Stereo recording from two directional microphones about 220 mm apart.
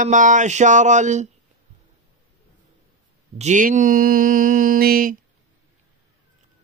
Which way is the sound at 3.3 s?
35° right (ahead or behind).